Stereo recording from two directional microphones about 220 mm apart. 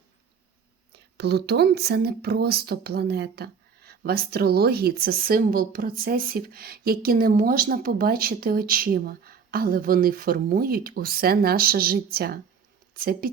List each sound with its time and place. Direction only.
0.9 s speech: 50° right (ahead or behind)